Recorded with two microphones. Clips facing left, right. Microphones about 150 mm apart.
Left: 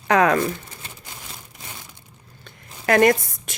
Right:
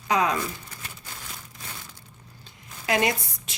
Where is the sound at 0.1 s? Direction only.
60° left (ahead or behind).